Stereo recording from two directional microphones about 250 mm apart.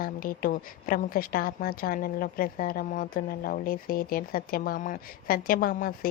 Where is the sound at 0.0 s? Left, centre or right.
Left.